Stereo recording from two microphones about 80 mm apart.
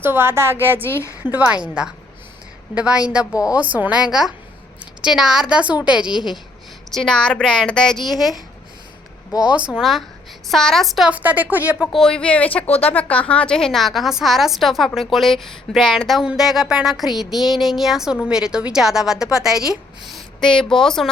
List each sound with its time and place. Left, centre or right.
0.0 s speech: right
0.9 s a woman's voice: left
1.2 s speech: right
1.6 s a woman's voice: centre
3.3 s a woman's voice: left
3.6 s a woman's voice: centre
6.9 s a woman's voice: centre
9.4 s a woman's voice: centre
10.5 s a sound: centre
11.1 s a woman's voice: centre
11.9 s a woman's voice: centre
14.9 s a sound: centre